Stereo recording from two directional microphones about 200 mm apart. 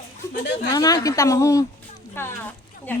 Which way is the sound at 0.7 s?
20° left (ahead or behind).